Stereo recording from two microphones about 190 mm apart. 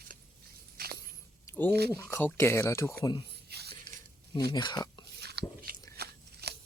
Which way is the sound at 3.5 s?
60° right (ahead or behind).